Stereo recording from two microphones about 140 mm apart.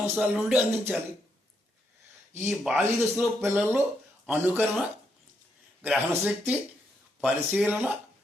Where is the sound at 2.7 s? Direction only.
15° right (ahead or behind).